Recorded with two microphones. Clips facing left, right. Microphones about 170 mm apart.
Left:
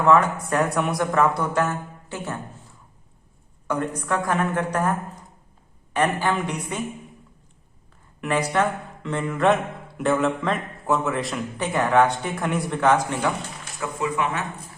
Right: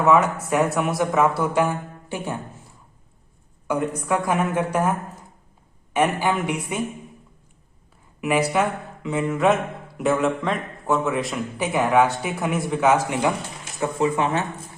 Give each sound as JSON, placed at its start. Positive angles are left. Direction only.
{"t": 0.0, "sound": "speech", "side_deg": -5}
{"t": 3.7, "sound": "speech", "side_deg": -10}
{"t": 8.2, "sound": "a man's voice", "side_deg": -10}
{"t": 13.7, "sound": "speech", "side_deg": -30}